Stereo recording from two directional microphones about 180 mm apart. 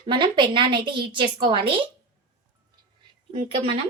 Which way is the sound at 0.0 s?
25° right (ahead or behind).